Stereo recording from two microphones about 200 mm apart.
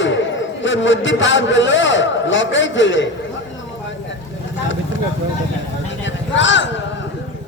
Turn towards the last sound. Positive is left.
turn(degrees=65)  # may be behind; listen again after turning